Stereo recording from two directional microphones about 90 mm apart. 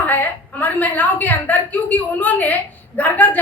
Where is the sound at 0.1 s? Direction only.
20° left (ahead or behind).